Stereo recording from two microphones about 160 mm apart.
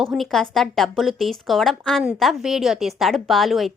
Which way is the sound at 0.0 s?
Centre (ahead or behind).